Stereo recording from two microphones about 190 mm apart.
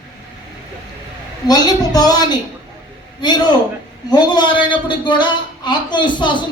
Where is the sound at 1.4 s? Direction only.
20° left (ahead or behind).